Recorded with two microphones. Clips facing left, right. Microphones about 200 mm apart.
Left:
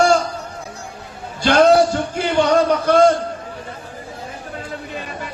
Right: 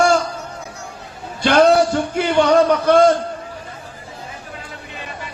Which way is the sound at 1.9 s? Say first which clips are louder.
Right 2 dB; 60° right (ahead or behind).